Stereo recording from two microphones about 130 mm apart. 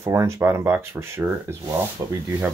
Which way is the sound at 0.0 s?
20° right (ahead or behind).